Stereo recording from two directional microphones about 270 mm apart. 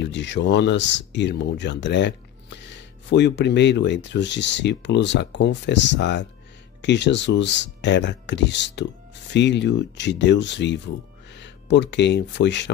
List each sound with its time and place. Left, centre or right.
0.0 s speech: left